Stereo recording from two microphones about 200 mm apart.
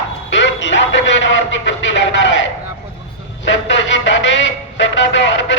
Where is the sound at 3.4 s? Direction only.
65° left (ahead or behind).